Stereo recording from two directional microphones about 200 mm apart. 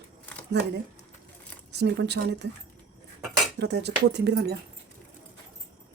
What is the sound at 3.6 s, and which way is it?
Speech, 55° right (ahead or behind).